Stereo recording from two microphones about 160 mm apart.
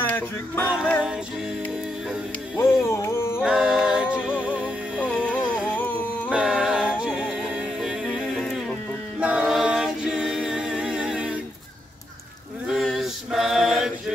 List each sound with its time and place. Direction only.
0.0 s music: 10° left (ahead or behind)
2.5 s music: 15° left (ahead or behind)
3.4 s music: 5° right (ahead or behind)
5.0 s music: 10° left (ahead or behind)
5.8 s a sound: 10° left (ahead or behind)
6.3 s music: 5° right (ahead or behind)
9.2 s a capella: 5° right (ahead or behind)
12.6 s male singing: centre (ahead or behind)